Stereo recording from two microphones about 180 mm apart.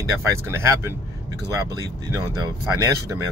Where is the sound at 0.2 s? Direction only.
15° right (ahead or behind).